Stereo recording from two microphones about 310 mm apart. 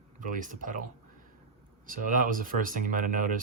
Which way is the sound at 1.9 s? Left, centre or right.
Right.